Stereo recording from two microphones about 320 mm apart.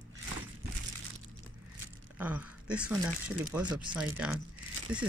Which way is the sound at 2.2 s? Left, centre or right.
Centre.